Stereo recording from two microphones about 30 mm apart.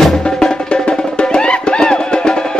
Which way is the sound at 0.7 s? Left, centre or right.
Left.